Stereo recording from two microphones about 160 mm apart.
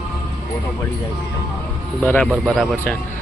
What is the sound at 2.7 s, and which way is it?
Speech, 10° left (ahead or behind).